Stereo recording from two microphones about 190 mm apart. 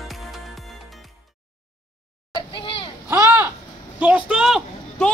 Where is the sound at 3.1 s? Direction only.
10° right (ahead or behind).